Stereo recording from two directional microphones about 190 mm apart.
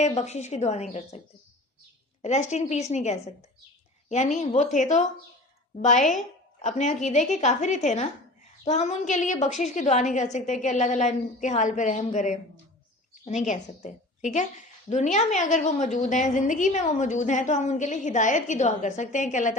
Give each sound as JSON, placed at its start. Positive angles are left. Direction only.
{"t": 0.0, "sound": "a woman's voice", "side_deg": 35}
{"t": 2.2, "sound": "a woman's voice", "side_deg": 35}